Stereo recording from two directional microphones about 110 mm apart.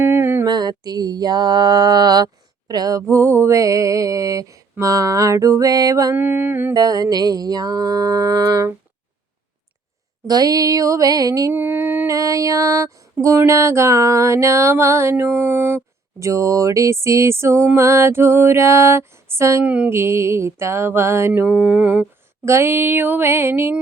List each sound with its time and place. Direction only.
0.0 s a sound: 20° right (ahead or behind)
0.4 s mantra: 40° right (ahead or behind)
6.1 s mantra: 20° right (ahead or behind)
6.7 s mantra: 35° right (ahead or behind)
10.2 s mantra: 35° right (ahead or behind)
11.5 s humming: 15° right (ahead or behind)
12.0 s mantra: 30° right (ahead or behind)
13.2 s a sound: 25° right (ahead or behind)
19.6 s mantra: 10° right (ahead or behind)
20.0 s a sound: 25° right (ahead or behind)
21.4 s mantra: 15° right (ahead or behind)
22.4 s a sound: 25° right (ahead or behind)